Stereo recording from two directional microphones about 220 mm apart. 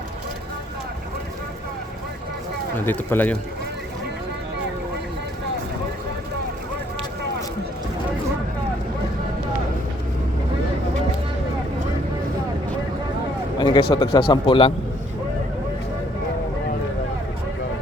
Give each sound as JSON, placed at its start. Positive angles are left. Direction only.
{"t": 2.8, "sound": "speech", "side_deg": 10}
{"t": 13.6, "sound": "a sound", "side_deg": 20}
{"t": 13.9, "sound": "a man's voice", "side_deg": 25}